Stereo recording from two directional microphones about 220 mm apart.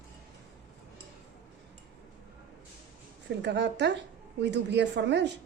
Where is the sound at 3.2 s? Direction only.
50° right (ahead or behind).